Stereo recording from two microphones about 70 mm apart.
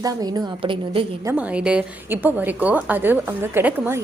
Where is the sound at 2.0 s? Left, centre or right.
Right.